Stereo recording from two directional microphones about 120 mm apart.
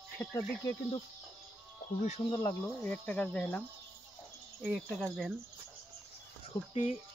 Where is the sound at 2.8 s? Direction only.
15° left (ahead or behind).